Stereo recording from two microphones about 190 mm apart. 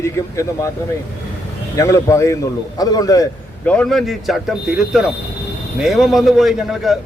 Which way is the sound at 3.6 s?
5° left (ahead or behind).